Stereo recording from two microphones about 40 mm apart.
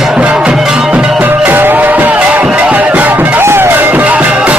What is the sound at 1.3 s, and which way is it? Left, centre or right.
Music, right.